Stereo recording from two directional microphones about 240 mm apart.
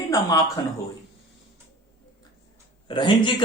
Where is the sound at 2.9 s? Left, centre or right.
Centre.